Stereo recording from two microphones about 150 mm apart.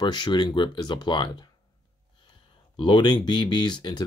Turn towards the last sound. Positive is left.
turn(degrees=30)  # may be behind; listen again after turning